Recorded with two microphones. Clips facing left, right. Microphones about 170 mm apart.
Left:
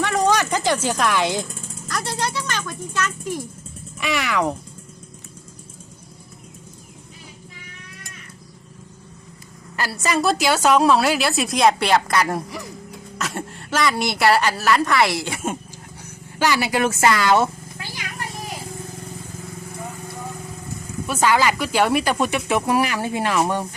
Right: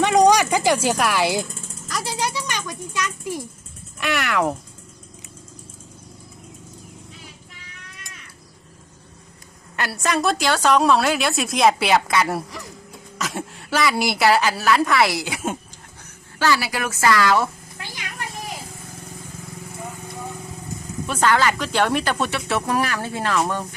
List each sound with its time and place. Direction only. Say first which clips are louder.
0.0 s a sound: right 4 dB; 15° right (ahead or behind)
1.9 s a child's voice: even; 10° right (ahead or behind)
4.0 s a woman's voice: even; centre (ahead or behind)
9.7 s a woman's voice: even; centre (ahead or behind)
16.4 s speech: left 2 dB; 20° left (ahead or behind)
21.1 s speech: left 1 dB; 10° left (ahead or behind)